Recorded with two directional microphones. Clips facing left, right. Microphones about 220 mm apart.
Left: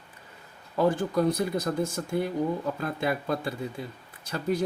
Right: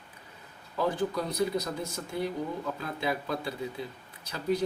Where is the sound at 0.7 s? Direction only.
50° left (ahead or behind).